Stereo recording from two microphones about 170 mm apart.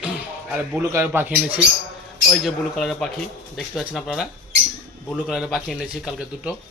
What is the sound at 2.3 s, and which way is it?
Speech, centre (ahead or behind).